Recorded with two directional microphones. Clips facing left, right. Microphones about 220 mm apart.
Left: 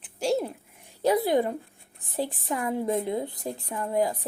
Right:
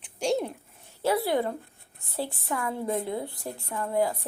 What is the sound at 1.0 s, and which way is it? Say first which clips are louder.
A woman's voice: left 3 dB; 15° left (ahead or behind).